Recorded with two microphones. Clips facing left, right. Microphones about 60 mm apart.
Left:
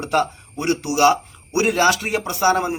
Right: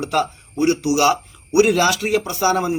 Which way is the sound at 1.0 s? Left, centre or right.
Left.